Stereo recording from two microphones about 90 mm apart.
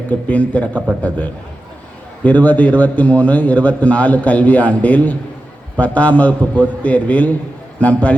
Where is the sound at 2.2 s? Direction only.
15° left (ahead or behind).